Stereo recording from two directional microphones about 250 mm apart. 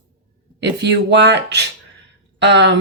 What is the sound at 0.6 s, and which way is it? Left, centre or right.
Speech, right.